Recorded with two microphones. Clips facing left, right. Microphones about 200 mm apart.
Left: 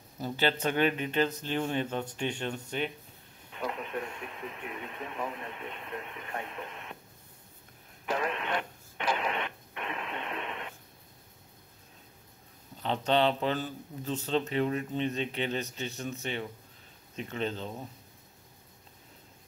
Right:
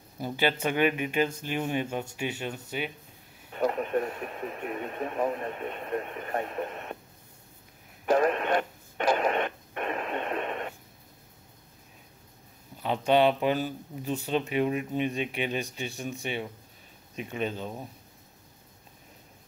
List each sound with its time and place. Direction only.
0.2 s speech: 10° right (ahead or behind)
3.5 s speech: 45° right (ahead or behind)
8.0 s radio: 45° right (ahead or behind)
12.8 s speech: 10° right (ahead or behind)